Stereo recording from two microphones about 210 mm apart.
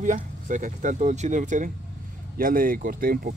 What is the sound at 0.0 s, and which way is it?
Speech, 35° right (ahead or behind).